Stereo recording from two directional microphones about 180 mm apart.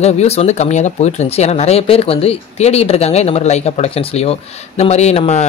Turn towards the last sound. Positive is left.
turn(degrees=35)  # may be behind; listen again after turning